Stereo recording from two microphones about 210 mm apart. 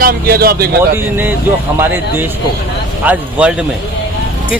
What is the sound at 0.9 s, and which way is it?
Speech, 10° right (ahead or behind).